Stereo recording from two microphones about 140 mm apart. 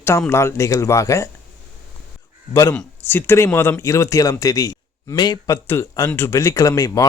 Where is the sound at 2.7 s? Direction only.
15° left (ahead or behind).